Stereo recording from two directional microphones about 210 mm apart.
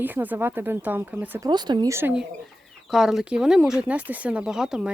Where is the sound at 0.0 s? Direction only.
10° right (ahead or behind).